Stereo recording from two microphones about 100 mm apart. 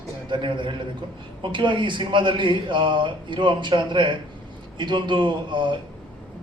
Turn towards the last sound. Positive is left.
turn(degrees=-55)  # may be behind; listen again after turning